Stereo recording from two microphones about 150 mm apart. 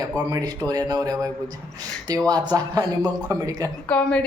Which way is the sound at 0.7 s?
25° right (ahead or behind).